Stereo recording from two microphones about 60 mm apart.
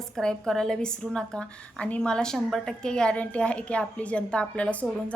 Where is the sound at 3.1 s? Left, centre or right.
Left.